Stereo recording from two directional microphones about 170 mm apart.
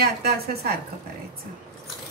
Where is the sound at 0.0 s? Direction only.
60° right (ahead or behind).